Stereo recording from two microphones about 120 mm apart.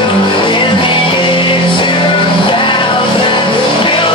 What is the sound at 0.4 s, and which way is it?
Music, 45° left (ahead or behind).